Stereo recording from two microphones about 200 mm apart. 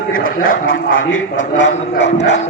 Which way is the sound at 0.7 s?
75° left (ahead or behind).